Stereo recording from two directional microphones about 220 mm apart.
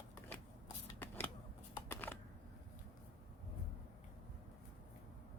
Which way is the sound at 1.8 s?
10° left (ahead or behind).